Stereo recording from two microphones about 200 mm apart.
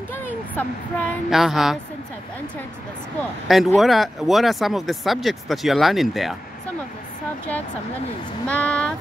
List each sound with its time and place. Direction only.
0.1 s speech: 10° left (ahead or behind)
3.4 s speech: centre (ahead or behind)
8.5 s speech: 5° left (ahead or behind)